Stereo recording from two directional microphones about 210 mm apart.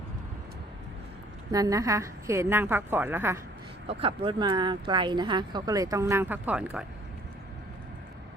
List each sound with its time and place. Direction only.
1.5 s a woman's voice: 15° right (ahead or behind)
3.8 s speech: 25° right (ahead or behind); by 6.8 s 5° right (ahead or behind)